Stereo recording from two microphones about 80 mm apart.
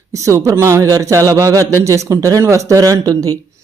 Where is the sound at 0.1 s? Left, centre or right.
Right.